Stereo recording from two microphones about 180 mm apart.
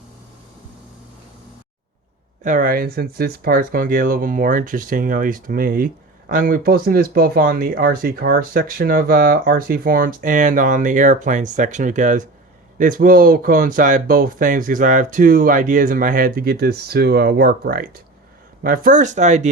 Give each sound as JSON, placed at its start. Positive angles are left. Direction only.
{"t": 2.4, "sound": "speech", "side_deg": -50}